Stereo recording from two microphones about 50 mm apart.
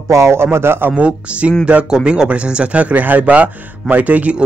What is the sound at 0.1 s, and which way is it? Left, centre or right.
Speech, right.